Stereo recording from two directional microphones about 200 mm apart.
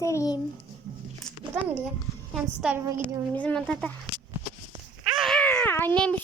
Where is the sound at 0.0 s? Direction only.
15° left (ahead or behind).